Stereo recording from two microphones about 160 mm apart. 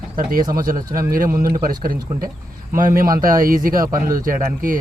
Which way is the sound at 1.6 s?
65° right (ahead or behind).